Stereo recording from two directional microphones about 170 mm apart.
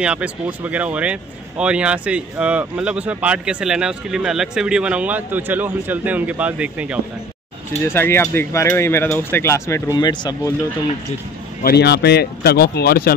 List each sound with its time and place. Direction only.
0.0 s speech: 5° right (ahead or behind)
7.8 s speech: 15° left (ahead or behind)
11.6 s speech: 75° left (ahead or behind)